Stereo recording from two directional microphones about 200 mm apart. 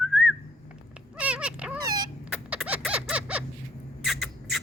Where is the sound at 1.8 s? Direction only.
20° right (ahead or behind).